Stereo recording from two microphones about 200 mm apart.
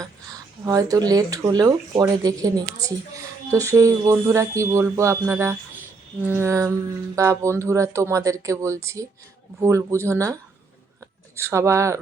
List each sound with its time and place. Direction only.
0.6 s speech: 15° right (ahead or behind)
11.3 s speech: 15° right (ahead or behind)